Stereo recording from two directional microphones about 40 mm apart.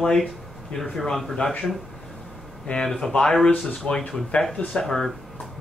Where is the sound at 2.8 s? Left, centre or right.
Centre.